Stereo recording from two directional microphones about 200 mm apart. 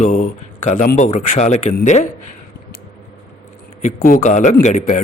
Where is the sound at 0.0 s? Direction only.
40° left (ahead or behind).